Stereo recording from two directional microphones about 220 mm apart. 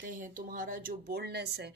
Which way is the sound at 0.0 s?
40° right (ahead or behind).